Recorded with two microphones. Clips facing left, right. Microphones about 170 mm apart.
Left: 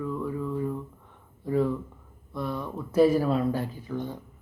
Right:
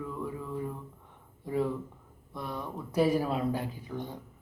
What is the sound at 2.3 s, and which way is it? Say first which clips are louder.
Speech: left 5 dB; 15° right (ahead or behind).